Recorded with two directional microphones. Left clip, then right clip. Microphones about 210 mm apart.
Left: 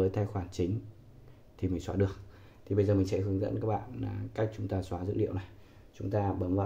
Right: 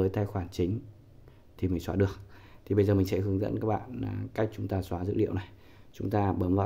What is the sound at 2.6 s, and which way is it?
Speech, 40° right (ahead or behind).